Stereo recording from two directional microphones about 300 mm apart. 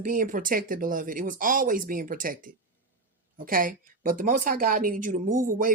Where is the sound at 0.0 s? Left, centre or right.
Right.